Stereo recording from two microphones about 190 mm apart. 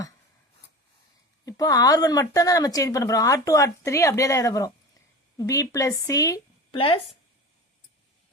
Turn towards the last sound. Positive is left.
turn(degrees=30)  # may be behind; listen again after turning